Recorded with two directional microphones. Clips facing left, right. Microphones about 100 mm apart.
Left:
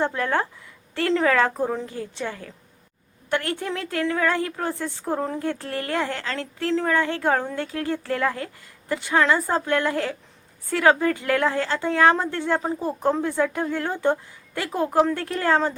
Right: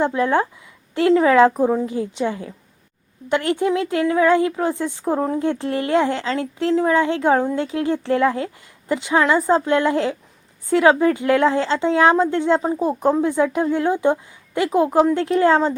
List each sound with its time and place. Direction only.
0.0 s a woman's voice: 15° right (ahead or behind)